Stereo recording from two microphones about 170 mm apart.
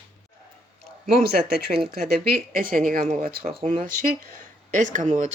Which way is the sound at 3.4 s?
35° right (ahead or behind).